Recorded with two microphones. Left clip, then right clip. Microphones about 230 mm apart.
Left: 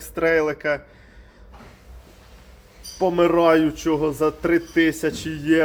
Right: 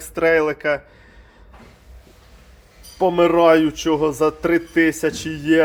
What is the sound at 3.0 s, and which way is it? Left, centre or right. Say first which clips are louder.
Speech: right 3 dB; centre.